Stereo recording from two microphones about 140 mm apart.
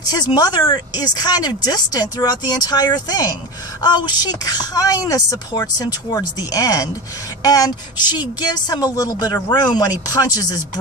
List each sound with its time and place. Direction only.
0.1 s speech: 30° left (ahead or behind)